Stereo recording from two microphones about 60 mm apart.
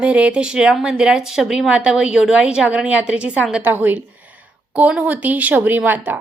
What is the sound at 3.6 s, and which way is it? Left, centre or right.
A woman's voice, right.